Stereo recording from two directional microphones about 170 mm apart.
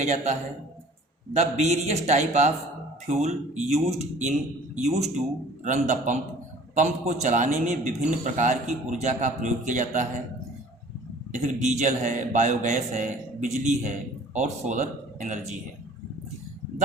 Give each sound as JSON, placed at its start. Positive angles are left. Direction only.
{"t": 0.0, "sound": "a man's voice", "side_deg": -40}
{"t": 11.3, "sound": "a man's voice", "side_deg": -45}